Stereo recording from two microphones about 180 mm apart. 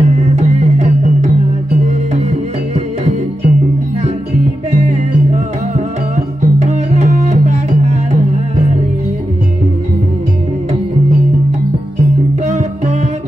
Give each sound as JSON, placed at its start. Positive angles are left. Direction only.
{"t": 0.0, "sound": "music", "side_deg": -40}
{"t": 2.7, "sound": "music", "side_deg": -40}
{"t": 4.6, "sound": "music", "side_deg": -40}
{"t": 12.4, "sound": "music", "side_deg": -40}